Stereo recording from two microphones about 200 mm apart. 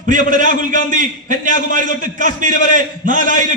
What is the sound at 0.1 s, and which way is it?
A man's voice, 40° right (ahead or behind).